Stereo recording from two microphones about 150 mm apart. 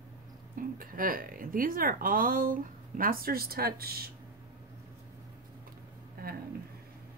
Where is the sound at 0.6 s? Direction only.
70° right (ahead or behind); by 4.1 s 90° right.